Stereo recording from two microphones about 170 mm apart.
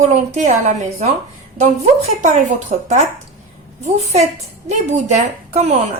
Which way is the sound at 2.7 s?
40° right (ahead or behind).